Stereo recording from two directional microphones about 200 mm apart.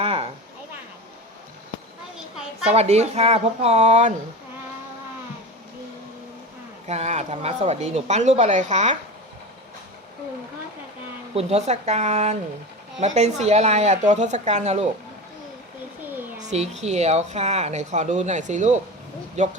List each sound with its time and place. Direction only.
0.0 s a sound: 30° right (ahead or behind)
2.6 s speech: 30° right (ahead or behind)
6.8 s speech: 35° right (ahead or behind)
11.3 s speech: 30° right (ahead or behind)
16.4 s speech: 35° right (ahead or behind)